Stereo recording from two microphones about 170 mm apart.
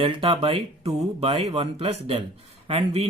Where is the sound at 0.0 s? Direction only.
30° right (ahead or behind).